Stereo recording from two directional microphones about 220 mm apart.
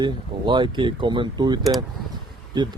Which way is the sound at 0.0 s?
20° right (ahead or behind).